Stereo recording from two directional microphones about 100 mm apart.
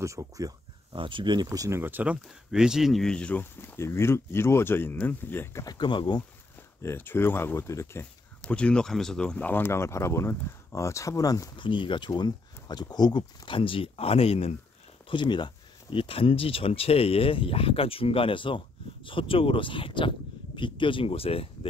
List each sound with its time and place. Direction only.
0.0 s speech: 30° right (ahead or behind)
0.9 s speech: 55° right (ahead or behind); by 1.8 s 35° right (ahead or behind)
1.8 s speech: 20° right (ahead or behind)
2.5 s speech: 5° right (ahead or behind); by 3.4 s 10° left (ahead or behind)
3.6 s speech: 25° left (ahead or behind)
5.8 s speech: 50° left (ahead or behind)
6.8 s speech: 20° left (ahead or behind)
8.4 s speech: 10° left (ahead or behind); by 11.5 s 35° left (ahead or behind)
11.5 s speech: 55° left (ahead or behind)
12.1 s speech: 45° left (ahead or behind); by 14.5 s 80° left
15.0 s speech: 50° left (ahead or behind); by 21.5 s 75° left (ahead or behind)